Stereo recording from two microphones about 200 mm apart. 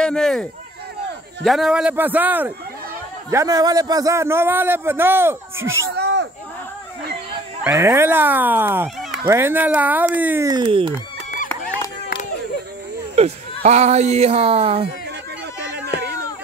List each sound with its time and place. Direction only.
0.0 s a man's voice: 5° left (ahead or behind); by 5.9 s 15° right (ahead or behind)
5.9 s a sound: 55° right (ahead or behind)
7.6 s a man's voice: 15° right (ahead or behind)
13.2 s speech: 30° right (ahead or behind)